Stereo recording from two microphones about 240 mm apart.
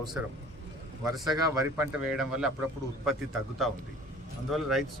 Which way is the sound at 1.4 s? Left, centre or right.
Centre.